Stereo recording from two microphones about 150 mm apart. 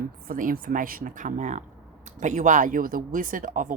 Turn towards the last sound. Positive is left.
turn(degrees=-60)  # may be behind; listen again after turning